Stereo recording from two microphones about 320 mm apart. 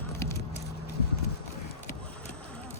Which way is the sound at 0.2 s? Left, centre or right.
Centre.